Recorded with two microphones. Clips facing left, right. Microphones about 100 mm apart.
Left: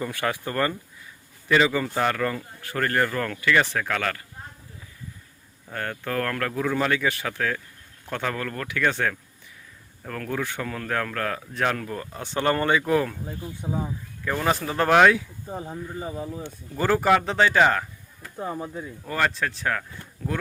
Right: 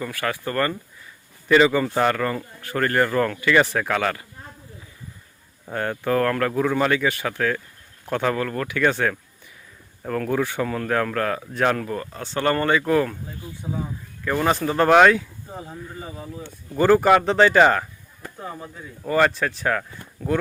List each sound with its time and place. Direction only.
0.0 s speech: 25° left (ahead or behind)
0.4 s speech: 10° left (ahead or behind)
1.5 s speech: centre (ahead or behind)
5.7 s speech: 15° right (ahead or behind)
12.1 s speech: 15° left (ahead or behind)
14.3 s speech: centre (ahead or behind)
15.6 s speech: 25° left (ahead or behind)
16.7 s speech: centre (ahead or behind)
18.3 s speech: 15° left (ahead or behind)
19.0 s speech: 5° right (ahead or behind)